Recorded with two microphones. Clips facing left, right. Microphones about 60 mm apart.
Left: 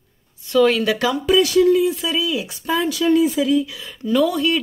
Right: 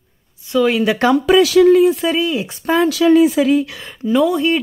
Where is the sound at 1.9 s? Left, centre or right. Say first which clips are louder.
Right 5 dB; right.